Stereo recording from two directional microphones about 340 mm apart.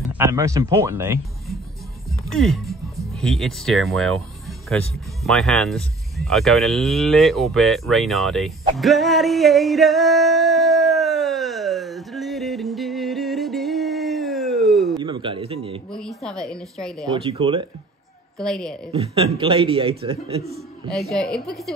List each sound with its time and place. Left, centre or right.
0.1 s speech: centre
2.2 s music: centre
15.0 s speech: centre
15.9 s a woman's voice: centre
17.1 s a man's voice: centre
18.4 s a woman's voice: centre
18.9 s a man's voice: centre
20.9 s a woman's voice: centre